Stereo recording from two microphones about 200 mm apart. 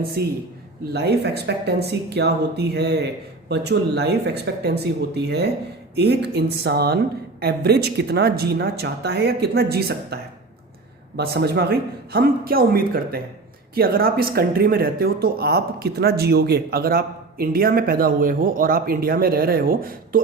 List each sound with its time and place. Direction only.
0.2 s speech: 50° right (ahead or behind)
11.2 s speech: 55° right (ahead or behind)